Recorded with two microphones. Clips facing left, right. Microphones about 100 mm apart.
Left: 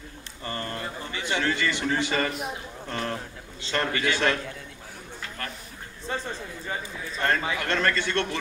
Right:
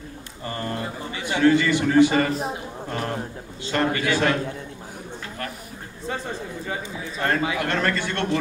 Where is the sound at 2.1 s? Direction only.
30° right (ahead or behind).